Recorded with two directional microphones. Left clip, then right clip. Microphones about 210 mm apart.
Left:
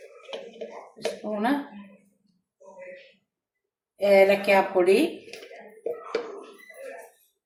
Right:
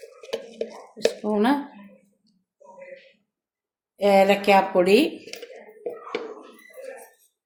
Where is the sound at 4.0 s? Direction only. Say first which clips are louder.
Right 1 dB; 45° right (ahead or behind).